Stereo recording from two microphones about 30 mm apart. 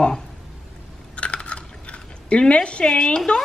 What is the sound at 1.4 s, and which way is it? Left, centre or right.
Typing, left.